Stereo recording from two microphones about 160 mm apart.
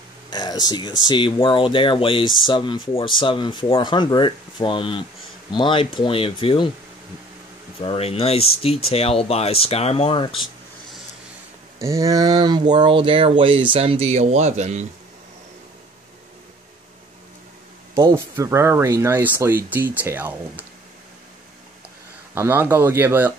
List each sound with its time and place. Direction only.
0.3 s speech: 25° left (ahead or behind)
7.8 s speech: 35° left (ahead or behind)
11.8 s speech: 20° right (ahead or behind); by 14.9 s 45° right (ahead or behind)
18.1 s speech: 15° right (ahead or behind)
22.3 s speech: 15° right (ahead or behind)